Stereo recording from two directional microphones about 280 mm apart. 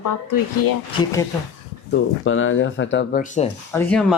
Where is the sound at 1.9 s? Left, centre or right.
Left.